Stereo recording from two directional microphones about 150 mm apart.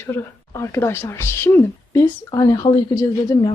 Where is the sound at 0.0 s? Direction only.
15° left (ahead or behind).